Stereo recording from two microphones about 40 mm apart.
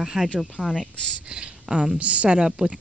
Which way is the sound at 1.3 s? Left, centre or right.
Right.